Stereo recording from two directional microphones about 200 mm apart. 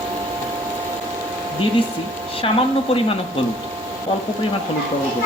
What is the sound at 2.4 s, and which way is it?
Speech, 25° left (ahead or behind).